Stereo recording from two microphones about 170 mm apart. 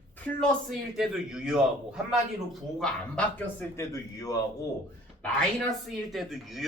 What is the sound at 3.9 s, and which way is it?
Speech, 20° left (ahead or behind).